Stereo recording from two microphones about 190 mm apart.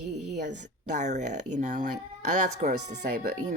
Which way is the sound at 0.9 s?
40° right (ahead or behind).